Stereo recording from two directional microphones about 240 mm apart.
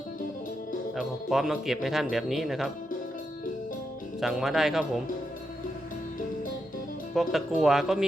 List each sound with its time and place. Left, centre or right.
0.9 s speech: centre
4.2 s speech: centre
7.2 s speech: centre